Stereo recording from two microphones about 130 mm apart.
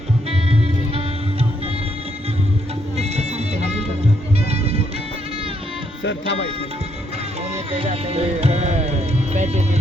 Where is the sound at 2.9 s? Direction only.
55° right (ahead or behind).